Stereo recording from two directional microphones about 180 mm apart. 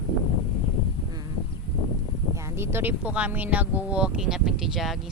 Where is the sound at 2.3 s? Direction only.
15° right (ahead or behind).